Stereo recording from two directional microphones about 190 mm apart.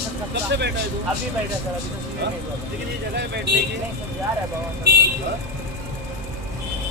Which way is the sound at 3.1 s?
60° right (ahead or behind).